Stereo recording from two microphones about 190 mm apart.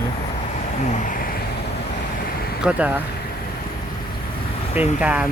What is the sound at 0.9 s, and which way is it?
Speech, 45° left (ahead or behind).